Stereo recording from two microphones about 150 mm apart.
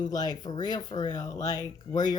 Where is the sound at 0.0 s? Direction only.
25° left (ahead or behind).